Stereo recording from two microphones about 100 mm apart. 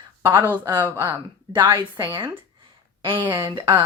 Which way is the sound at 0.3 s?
20° right (ahead or behind).